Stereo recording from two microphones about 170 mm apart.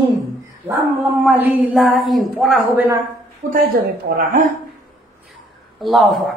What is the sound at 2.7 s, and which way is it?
Speech, 15° right (ahead or behind).